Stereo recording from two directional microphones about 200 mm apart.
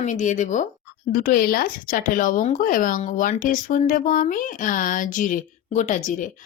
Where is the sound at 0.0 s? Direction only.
35° left (ahead or behind).